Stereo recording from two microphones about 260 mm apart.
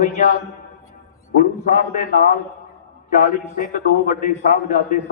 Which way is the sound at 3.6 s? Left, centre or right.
Left.